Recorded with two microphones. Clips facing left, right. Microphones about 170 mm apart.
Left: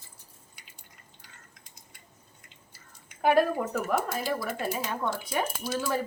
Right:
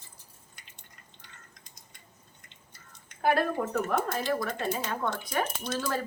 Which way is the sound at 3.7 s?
5° left (ahead or behind).